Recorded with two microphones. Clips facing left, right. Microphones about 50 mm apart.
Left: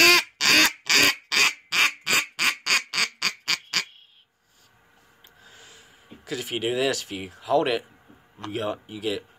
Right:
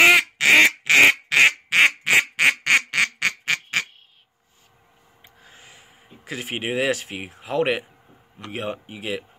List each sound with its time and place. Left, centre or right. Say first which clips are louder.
0.4 s quack: right 6 dB; right
5.4 s a sound: right 1 dB; right
8.5 s speech: left 1 dB; right